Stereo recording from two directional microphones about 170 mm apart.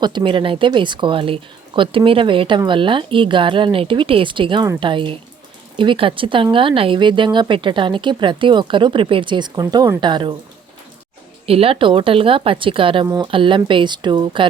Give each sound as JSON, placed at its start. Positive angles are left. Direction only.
{"t": 0.0, "sound": "a woman's voice", "side_deg": -25}
{"t": 11.4, "sound": "a woman's voice", "side_deg": -35}